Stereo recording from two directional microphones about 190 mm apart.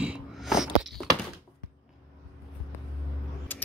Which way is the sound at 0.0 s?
5° right (ahead or behind).